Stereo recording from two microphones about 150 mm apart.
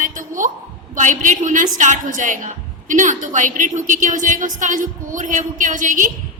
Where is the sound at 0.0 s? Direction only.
65° right (ahead or behind).